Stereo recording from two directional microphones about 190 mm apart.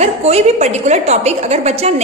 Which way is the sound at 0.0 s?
35° right (ahead or behind).